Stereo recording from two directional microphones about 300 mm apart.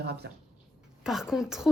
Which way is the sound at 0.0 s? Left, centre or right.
Right.